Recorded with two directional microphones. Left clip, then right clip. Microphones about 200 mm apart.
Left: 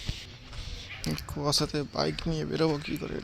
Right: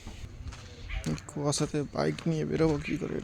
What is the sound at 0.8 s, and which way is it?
Speech, 15° right (ahead or behind).